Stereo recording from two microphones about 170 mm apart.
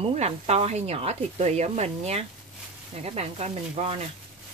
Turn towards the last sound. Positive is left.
turn(degrees=-40)  # may be behind; listen again after turning